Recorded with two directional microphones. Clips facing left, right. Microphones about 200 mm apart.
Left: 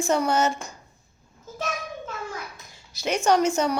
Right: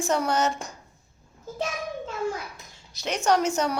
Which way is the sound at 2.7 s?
5° left (ahead or behind).